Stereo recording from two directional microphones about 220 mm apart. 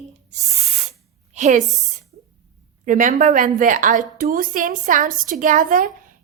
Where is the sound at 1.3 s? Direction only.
30° right (ahead or behind).